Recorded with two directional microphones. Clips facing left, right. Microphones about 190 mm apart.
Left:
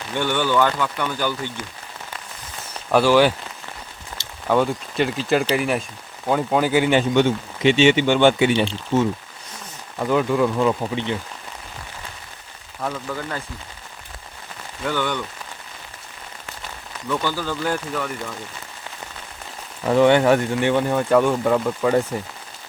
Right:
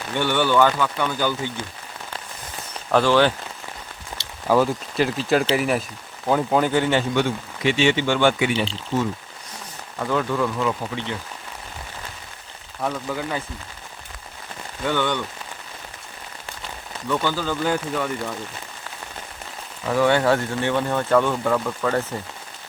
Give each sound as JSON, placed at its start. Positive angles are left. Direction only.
{"t": 0.2, "sound": "speech", "side_deg": 15}
{"t": 0.5, "sound": "speech", "side_deg": -10}
{"t": 2.9, "sound": "speech", "side_deg": 10}
{"t": 4.1, "sound": "a sound", "side_deg": -20}
{"t": 4.4, "sound": "speech", "side_deg": 0}
{"t": 12.8, "sound": "speech", "side_deg": -5}
{"t": 14.8, "sound": "speech", "side_deg": 5}
{"t": 17.1, "sound": "speech", "side_deg": 10}
{"t": 17.5, "sound": "speech", "side_deg": -5}
{"t": 19.9, "sound": "speech", "side_deg": 20}